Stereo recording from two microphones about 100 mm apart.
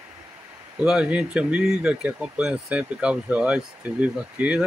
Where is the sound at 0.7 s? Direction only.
10° right (ahead or behind).